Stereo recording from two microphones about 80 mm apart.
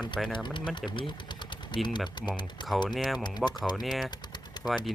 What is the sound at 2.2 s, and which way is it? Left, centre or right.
Speech, left.